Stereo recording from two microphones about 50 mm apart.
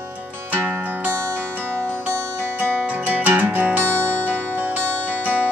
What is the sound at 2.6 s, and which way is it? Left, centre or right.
Music, right.